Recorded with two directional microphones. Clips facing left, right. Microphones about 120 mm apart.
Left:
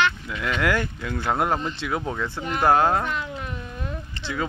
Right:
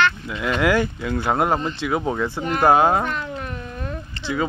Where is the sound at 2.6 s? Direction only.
10° right (ahead or behind).